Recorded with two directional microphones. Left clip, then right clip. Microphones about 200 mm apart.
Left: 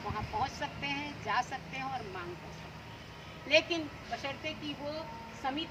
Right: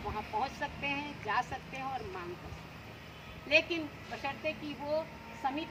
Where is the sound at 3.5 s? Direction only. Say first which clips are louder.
Left 1 dB; 5° left (ahead or behind).